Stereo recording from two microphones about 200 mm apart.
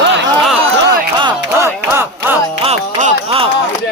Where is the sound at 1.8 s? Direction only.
10° right (ahead or behind).